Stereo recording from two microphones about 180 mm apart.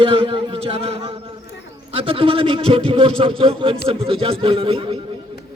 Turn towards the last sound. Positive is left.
turn(degrees=-30)  # may be behind; listen again after turning